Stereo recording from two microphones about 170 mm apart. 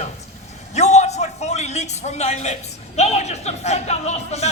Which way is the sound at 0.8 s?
40° left (ahead or behind).